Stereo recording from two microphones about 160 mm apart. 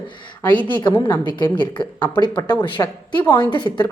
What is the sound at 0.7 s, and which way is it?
Speech, 30° left (ahead or behind).